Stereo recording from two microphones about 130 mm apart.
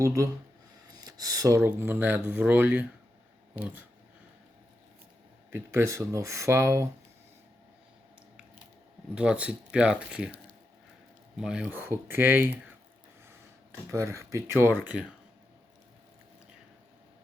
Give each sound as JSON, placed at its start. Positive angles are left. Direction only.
{"t": 0.0, "sound": "speech", "side_deg": -25}
{"t": 5.5, "sound": "speech", "side_deg": -20}
{"t": 9.1, "sound": "speech", "side_deg": -10}
{"t": 11.3, "sound": "speech", "side_deg": -5}
{"t": 13.9, "sound": "speech", "side_deg": -20}